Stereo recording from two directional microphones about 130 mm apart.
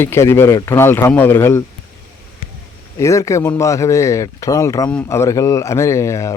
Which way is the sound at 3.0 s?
25° left (ahead or behind).